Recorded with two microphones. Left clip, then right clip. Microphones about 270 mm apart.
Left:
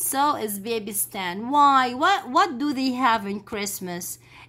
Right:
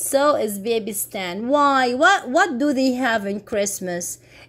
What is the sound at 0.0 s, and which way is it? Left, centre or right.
A woman's voice, centre.